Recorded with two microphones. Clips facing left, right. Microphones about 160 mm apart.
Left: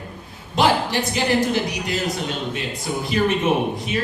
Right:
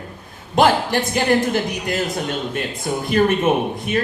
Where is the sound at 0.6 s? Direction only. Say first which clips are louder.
Right 3 dB; 50° right (ahead or behind).